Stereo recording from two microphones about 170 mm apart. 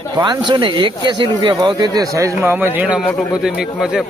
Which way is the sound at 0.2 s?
25° right (ahead or behind).